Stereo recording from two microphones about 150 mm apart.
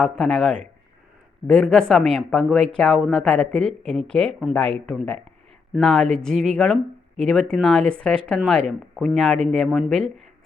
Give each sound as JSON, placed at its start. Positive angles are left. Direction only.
{"t": 0.0, "sound": "speech", "side_deg": 5}
{"t": 9.6, "sound": "speech", "side_deg": -5}
{"t": 9.9, "sound": "speech", "side_deg": 5}